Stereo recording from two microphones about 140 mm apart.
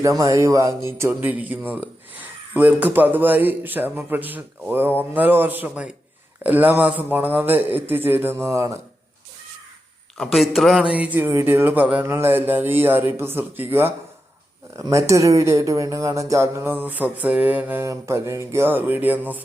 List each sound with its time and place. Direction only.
0.2 s speech: 25° right (ahead or behind)
10.3 s speech: centre (ahead or behind)